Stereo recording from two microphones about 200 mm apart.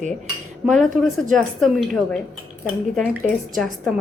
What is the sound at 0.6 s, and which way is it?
Speech, centre (ahead or behind).